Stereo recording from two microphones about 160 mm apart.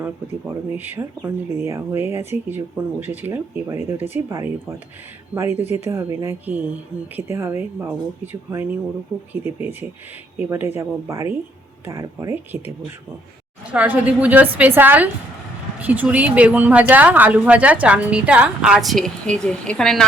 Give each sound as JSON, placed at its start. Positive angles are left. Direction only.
{"t": 0.0, "sound": "speech", "side_deg": -10}
{"t": 13.7, "sound": "speech", "side_deg": -10}